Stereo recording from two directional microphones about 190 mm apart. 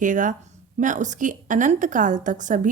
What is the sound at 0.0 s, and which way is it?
A woman's voice, 45° right (ahead or behind).